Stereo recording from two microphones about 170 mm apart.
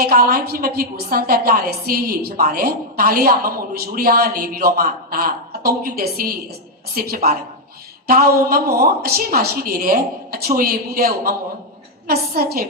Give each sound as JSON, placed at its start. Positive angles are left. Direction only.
{"t": 0.0, "sound": "a woman's voice", "side_deg": -60}